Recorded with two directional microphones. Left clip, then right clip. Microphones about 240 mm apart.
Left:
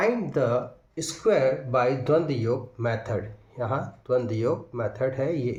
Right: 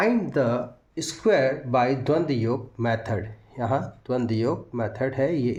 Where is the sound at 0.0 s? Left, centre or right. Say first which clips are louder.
Right 1 dB; right.